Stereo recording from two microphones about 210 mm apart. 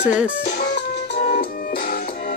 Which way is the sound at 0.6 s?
55° left (ahead or behind).